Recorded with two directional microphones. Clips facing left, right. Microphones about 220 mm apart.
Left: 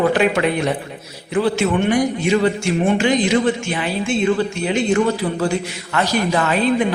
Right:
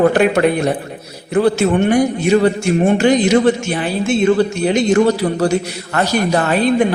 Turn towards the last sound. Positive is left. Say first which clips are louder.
# right 3 dB
turn(degrees=-40)  # may be behind; listen again after turning